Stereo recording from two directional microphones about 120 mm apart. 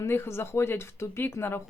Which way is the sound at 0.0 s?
20° left (ahead or behind).